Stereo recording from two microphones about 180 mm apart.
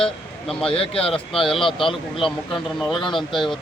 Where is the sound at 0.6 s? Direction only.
30° left (ahead or behind).